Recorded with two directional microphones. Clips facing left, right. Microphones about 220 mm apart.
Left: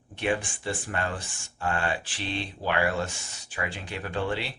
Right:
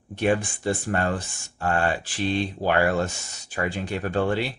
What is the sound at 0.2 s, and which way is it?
Speech, 40° right (ahead or behind).